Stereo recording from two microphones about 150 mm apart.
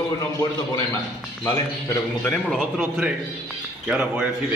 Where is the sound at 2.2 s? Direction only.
5° left (ahead or behind).